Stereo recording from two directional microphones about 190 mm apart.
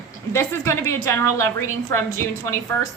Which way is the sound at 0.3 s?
15° left (ahead or behind).